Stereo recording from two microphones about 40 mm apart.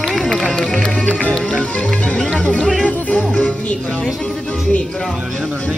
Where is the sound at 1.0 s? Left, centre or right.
Left.